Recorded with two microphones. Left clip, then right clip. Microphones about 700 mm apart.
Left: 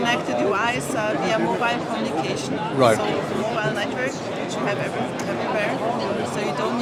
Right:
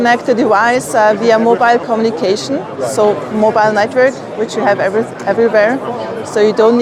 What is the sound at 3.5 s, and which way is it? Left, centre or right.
Speech, right.